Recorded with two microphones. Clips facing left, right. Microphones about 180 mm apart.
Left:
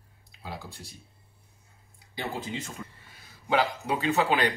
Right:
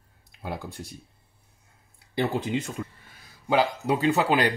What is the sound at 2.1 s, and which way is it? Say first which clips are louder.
Speech: right 8 dB; 60° right (ahead or behind).